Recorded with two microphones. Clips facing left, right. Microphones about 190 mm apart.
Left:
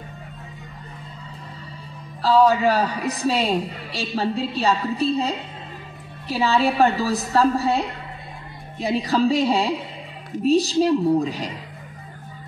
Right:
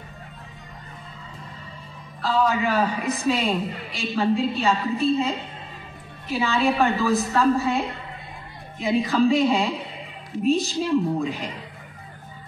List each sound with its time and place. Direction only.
2.2 s a woman's voice: 40° left (ahead or behind)